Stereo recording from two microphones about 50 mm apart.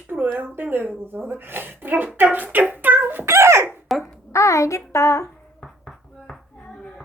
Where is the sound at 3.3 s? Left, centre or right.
Right.